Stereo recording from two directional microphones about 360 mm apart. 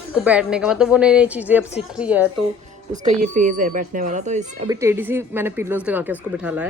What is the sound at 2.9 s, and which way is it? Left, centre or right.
Speech, right.